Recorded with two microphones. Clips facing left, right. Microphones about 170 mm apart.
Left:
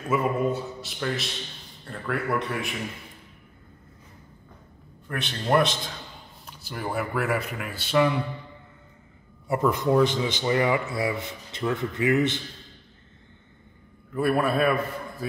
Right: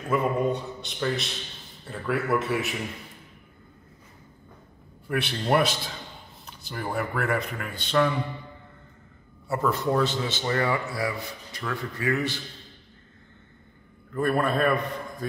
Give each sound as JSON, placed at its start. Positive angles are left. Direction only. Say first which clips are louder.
{"t": 0.1, "sound": "a man's voice", "louder": "even", "side_deg": 5}
{"t": 5.0, "sound": "a man's voice", "louder": "right 3 dB", "side_deg": -5}
{"t": 9.5, "sound": "a man's voice", "louder": "left 3 dB", "side_deg": 15}
{"t": 14.1, "sound": "a man's voice", "louder": "left 1 dB", "side_deg": 10}